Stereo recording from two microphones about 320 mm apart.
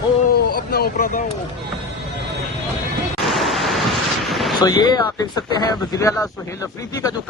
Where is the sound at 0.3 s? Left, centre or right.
Left.